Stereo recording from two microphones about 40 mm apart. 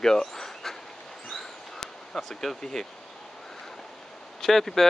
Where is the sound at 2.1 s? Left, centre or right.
Centre.